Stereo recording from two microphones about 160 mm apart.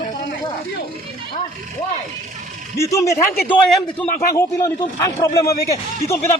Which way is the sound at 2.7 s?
20° left (ahead or behind).